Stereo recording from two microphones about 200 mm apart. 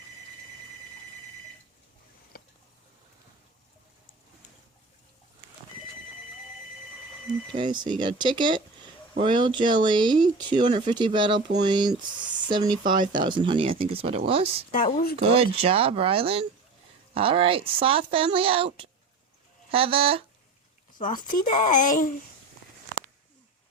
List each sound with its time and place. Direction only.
7.5 s speech: 25° right (ahead or behind)
14.7 s speech: 40° left (ahead or behind)
15.2 s speech: 30° right (ahead or behind)
21.0 s speech: 40° left (ahead or behind)